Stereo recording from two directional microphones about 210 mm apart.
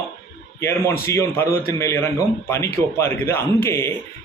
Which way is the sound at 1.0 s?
15° left (ahead or behind).